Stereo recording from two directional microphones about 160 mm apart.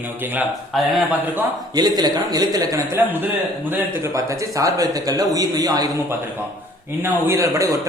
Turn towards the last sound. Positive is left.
turn(degrees=-20)  # may be behind; listen again after turning